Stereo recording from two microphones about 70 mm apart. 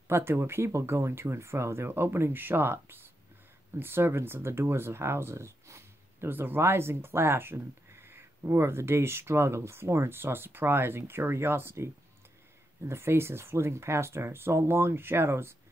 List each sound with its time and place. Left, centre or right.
0.1 s speech: right